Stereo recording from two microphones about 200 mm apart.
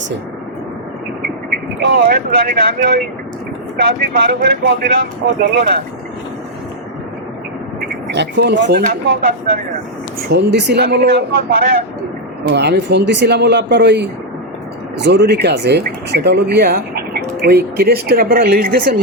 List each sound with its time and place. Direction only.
1.8 s speech: 50° right (ahead or behind)
8.1 s speech: 55° right (ahead or behind)